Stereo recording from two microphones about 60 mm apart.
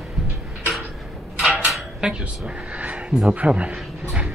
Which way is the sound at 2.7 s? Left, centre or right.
Right.